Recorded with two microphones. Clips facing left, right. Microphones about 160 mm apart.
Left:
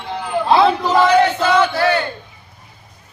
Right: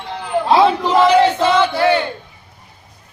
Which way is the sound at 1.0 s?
30° right (ahead or behind).